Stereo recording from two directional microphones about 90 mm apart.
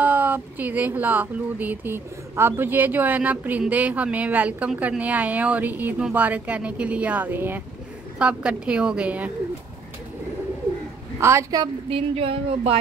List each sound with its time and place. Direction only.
0.0 s speech: 20° right (ahead or behind)
8.2 s speech: 10° right (ahead or behind)
11.1 s a woman's voice: 30° right (ahead or behind)
11.9 s speech: 90° right